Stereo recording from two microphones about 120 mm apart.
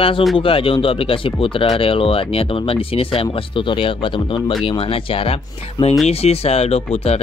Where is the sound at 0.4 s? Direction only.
50° left (ahead or behind).